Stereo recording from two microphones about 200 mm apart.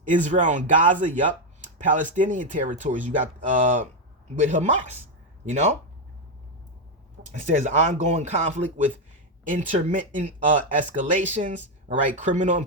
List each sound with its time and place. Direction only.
0.0 s speech: 40° right (ahead or behind)
7.2 s speech: 40° right (ahead or behind)